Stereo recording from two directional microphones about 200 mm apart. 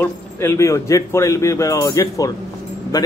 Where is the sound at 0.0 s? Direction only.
15° left (ahead or behind).